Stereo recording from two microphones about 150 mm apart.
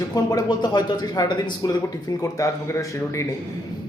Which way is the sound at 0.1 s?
25° left (ahead or behind).